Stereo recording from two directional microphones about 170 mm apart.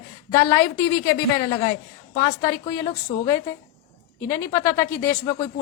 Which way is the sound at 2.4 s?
20° left (ahead or behind).